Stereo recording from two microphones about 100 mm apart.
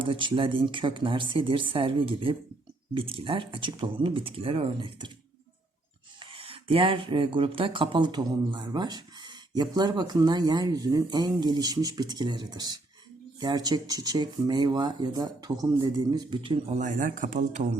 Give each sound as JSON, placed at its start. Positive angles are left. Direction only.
{"t": 0.0, "sound": "speech", "side_deg": -55}
{"t": 6.1, "sound": "speech", "side_deg": -65}